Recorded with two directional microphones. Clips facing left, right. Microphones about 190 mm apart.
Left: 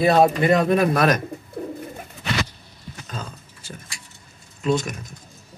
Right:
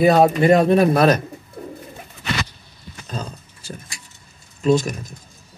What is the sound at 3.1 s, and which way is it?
Speech, 35° right (ahead or behind).